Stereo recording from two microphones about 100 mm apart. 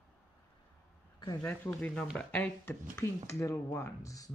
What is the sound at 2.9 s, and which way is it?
Speech, 30° left (ahead or behind).